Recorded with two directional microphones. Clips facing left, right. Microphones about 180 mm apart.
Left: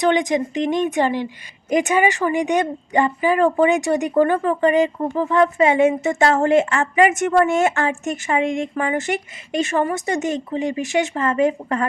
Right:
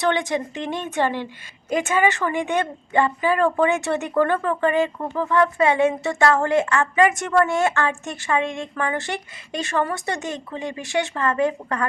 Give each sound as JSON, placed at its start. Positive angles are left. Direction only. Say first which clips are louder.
{"t": 0.0, "sound": "a woman's voice", "louder": "left 4 dB", "side_deg": 15}